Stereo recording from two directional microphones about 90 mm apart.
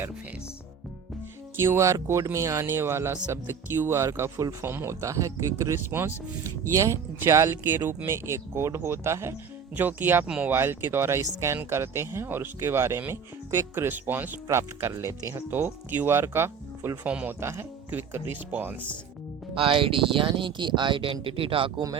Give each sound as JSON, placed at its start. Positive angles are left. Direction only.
{"t": 1.5, "sound": "speech", "side_deg": -30}
{"t": 10.5, "sound": "speech", "side_deg": -25}
{"t": 17.0, "sound": "speech", "side_deg": -15}
{"t": 17.4, "sound": "speech", "side_deg": -30}
{"t": 19.5, "sound": "speech", "side_deg": -80}